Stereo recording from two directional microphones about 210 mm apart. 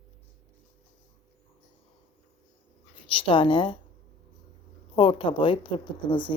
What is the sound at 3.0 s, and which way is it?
Speech, 25° left (ahead or behind).